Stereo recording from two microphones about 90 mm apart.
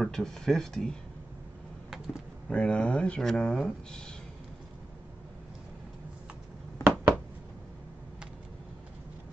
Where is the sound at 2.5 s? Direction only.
10° left (ahead or behind).